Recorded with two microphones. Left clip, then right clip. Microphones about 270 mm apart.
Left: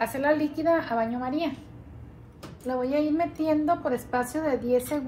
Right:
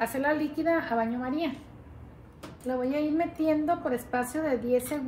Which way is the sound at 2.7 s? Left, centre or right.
Centre.